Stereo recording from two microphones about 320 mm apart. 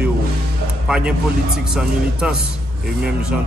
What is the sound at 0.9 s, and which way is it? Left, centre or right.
Speech, centre.